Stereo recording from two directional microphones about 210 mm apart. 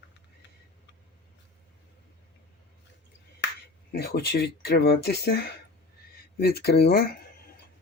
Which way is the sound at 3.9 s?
50° left (ahead or behind).